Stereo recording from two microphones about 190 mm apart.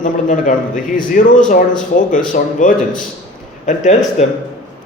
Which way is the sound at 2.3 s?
45° left (ahead or behind).